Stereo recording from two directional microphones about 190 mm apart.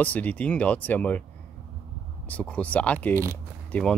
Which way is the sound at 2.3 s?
5° left (ahead or behind).